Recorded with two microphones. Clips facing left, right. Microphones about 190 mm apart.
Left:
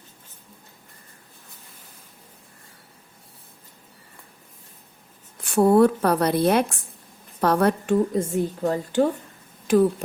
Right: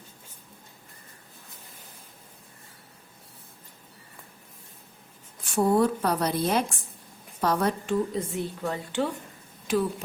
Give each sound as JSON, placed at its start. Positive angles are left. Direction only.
{"t": 5.5, "sound": "a woman's voice", "side_deg": 60}